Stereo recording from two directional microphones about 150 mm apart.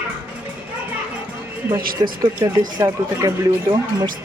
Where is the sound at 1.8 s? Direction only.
75° right (ahead or behind).